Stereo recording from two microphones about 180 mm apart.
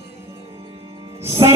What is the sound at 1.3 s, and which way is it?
Music, 15° right (ahead or behind).